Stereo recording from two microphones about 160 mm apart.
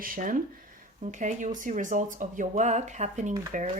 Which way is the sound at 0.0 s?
60° right (ahead or behind).